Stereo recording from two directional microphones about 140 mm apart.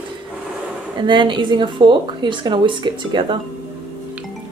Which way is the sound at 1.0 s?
35° right (ahead or behind).